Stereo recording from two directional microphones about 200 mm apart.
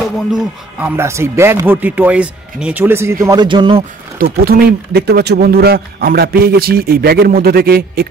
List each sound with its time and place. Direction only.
0.3 s speech: 10° right (ahead or behind); by 3.8 s 25° right (ahead or behind)
4.2 s speech: 50° right (ahead or behind)